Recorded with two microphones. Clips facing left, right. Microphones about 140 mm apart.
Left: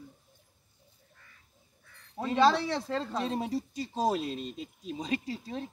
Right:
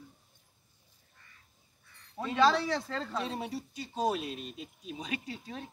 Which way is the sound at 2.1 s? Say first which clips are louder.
Left 2 dB; 30° left (ahead or behind).